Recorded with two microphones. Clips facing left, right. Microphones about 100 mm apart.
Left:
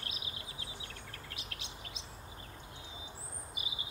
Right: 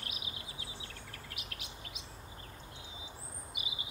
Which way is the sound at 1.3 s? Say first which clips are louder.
Even; 30° left (ahead or behind).